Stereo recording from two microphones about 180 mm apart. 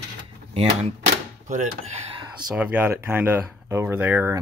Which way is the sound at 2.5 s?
10° right (ahead or behind).